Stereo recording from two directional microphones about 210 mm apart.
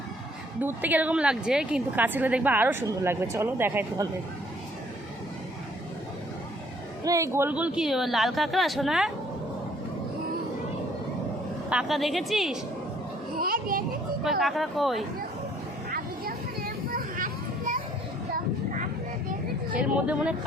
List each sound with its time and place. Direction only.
0.6 s a woman's voice: 10° right (ahead or behind)
7.0 s a woman's voice: 15° right (ahead or behind)
11.7 s a woman's voice: centre (ahead or behind)
13.4 s a child's voice: 45° right (ahead or behind)
14.3 s a woman's voice: centre (ahead or behind)
15.9 s a sound: 45° right (ahead or behind)
18.3 s vehicle: 40° right (ahead or behind)
19.8 s a woman's voice: 5° right (ahead or behind)